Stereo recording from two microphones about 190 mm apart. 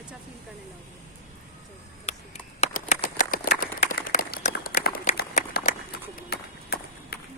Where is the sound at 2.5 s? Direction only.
35° left (ahead or behind); by 4.8 s 50° left (ahead or behind).